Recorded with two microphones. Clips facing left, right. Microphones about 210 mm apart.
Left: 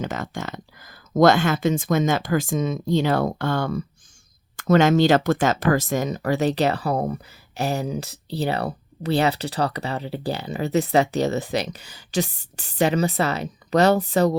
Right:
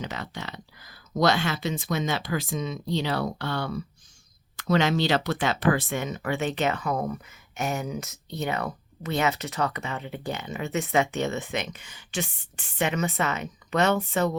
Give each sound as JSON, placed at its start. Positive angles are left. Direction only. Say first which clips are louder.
{"t": 0.0, "sound": "speech", "louder": "left 6 dB", "side_deg": 45}